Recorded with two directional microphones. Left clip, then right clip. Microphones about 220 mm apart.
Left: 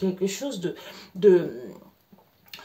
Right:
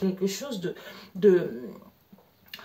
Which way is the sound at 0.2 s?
20° left (ahead or behind).